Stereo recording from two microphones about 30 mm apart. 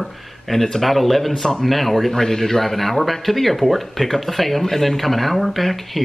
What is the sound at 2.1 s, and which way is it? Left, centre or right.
Speech, centre.